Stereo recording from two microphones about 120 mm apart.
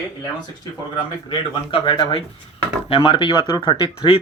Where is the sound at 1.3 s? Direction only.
45° left (ahead or behind).